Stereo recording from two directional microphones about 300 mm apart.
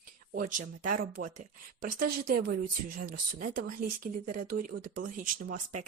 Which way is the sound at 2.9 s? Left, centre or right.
Right.